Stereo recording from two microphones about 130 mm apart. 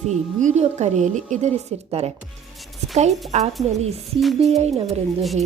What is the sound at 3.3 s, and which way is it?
Speech, 60° right (ahead or behind).